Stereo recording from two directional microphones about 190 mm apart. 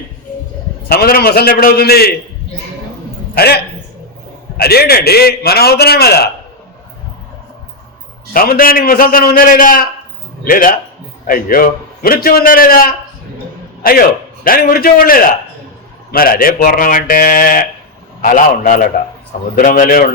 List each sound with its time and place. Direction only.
0.9 s a man's voice: 50° left (ahead or behind)
3.3 s a man's voice: 55° left (ahead or behind)
8.3 s a man's voice: 50° left (ahead or behind)
14.4 s a man's voice: 50° left (ahead or behind)